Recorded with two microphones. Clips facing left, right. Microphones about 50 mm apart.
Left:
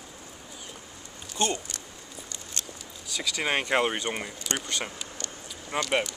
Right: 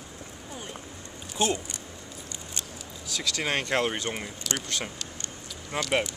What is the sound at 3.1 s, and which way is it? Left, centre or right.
Speech, centre.